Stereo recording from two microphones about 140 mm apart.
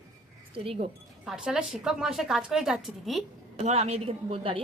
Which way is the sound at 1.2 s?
5° right (ahead or behind).